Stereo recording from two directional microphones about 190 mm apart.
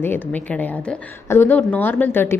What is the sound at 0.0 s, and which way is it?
A woman's voice, 10° left (ahead or behind).